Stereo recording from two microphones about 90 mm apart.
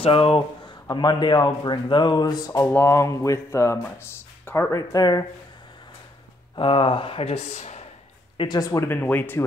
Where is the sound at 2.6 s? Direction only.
30° left (ahead or behind); by 5.2 s 45° left (ahead or behind).